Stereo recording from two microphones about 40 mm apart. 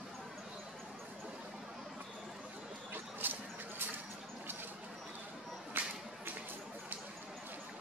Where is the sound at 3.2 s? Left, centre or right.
Right.